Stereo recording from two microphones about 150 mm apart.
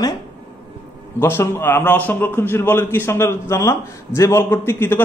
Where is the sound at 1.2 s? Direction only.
15° left (ahead or behind).